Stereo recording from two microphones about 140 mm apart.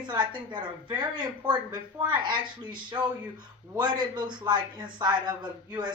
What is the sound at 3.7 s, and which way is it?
Speech, 30° right (ahead or behind).